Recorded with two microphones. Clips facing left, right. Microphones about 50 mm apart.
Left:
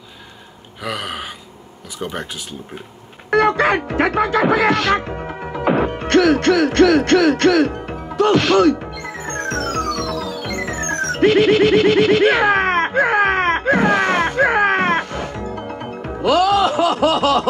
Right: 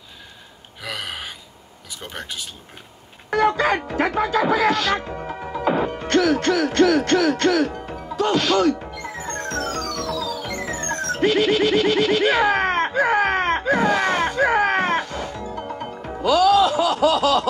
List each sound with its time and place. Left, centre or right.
0.8 s speech: centre
3.3 s speech: left
5.2 s music: left